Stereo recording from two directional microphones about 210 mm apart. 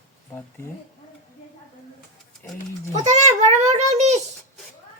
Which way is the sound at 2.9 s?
35° right (ahead or behind).